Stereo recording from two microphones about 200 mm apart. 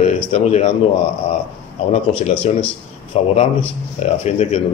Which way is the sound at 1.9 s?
30° left (ahead or behind).